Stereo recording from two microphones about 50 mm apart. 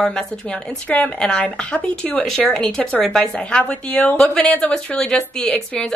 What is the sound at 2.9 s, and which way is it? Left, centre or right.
A woman's voice, centre.